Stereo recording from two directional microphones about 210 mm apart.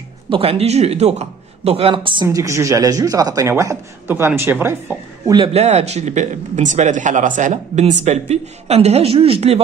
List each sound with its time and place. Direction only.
0.3 s speech: 25° right (ahead or behind)
2.2 s speech: 15° right (ahead or behind)